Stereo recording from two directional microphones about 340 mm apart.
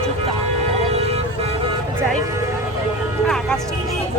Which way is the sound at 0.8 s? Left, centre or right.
Centre.